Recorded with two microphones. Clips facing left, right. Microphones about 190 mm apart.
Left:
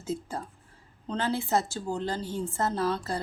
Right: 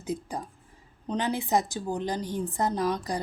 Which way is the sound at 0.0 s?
15° right (ahead or behind).